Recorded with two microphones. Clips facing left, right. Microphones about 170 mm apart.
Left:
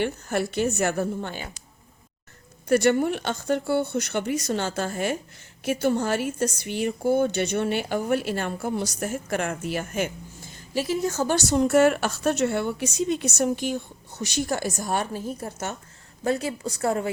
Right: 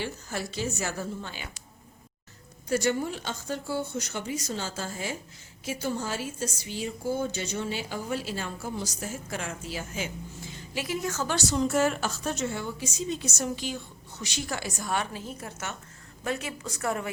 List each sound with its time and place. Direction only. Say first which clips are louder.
0.0 s a woman's voice: left 8 dB; 60° left (ahead or behind)
2.6 s a woman's voice: left 7 dB; 65° left (ahead or behind)
10.4 s a sound: left 8 dB; 45° left (ahead or behind)
10.8 s a woman's voice: left 5 dB; 35° left (ahead or behind)
11.4 s a woman's voice: left 6 dB; 55° left (ahead or behind); by 17.1 s 30° left (ahead or behind)